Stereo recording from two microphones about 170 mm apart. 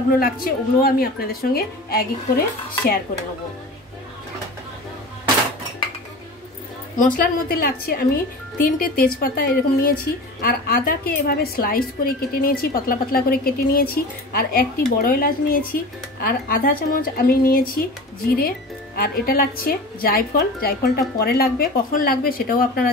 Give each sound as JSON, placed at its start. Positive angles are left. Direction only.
{"t": 0.2, "sound": "a woman's voice", "side_deg": 60}
{"t": 7.0, "sound": "a woman's voice", "side_deg": 55}